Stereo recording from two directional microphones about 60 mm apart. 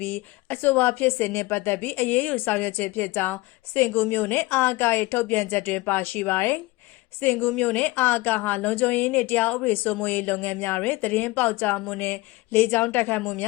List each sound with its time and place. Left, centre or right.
0.0 s speech: left
7.5 s a woman's voice: left